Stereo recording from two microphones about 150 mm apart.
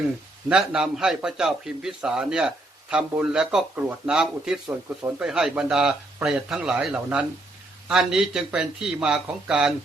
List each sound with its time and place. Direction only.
0.4 s a man's voice: 5° right (ahead or behind)